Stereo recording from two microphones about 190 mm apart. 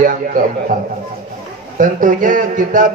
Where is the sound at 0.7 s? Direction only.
45° right (ahead or behind).